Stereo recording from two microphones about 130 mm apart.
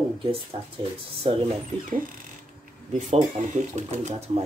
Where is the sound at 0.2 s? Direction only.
45° right (ahead or behind).